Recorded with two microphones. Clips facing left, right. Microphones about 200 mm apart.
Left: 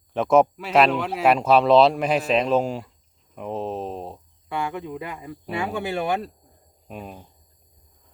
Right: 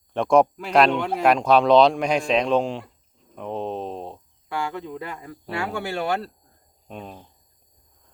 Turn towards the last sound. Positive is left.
turn(degrees=5)  # may be behind; listen again after turning